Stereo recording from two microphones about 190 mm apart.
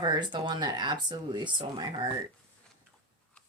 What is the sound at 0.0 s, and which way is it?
Speech, 25° right (ahead or behind).